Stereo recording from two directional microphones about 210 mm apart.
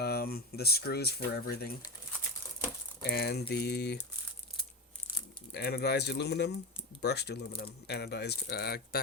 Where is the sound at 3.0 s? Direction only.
50° left (ahead or behind).